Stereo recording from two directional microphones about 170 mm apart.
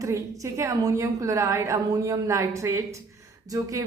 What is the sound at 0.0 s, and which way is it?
A woman's voice, 15° right (ahead or behind).